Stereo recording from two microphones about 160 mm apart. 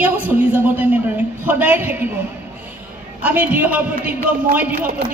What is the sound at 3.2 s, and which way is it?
Speech, 10° right (ahead or behind).